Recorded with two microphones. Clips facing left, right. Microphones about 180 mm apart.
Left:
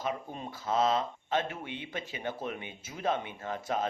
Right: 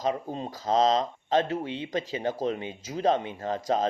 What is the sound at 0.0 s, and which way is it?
Speech, 35° right (ahead or behind).